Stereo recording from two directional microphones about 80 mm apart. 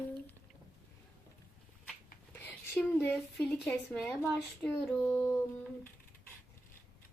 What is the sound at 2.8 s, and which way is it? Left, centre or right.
Speech, left.